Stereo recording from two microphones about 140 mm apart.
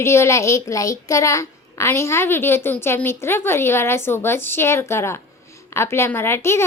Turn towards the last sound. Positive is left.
turn(degrees=20)  # may be behind; listen again after turning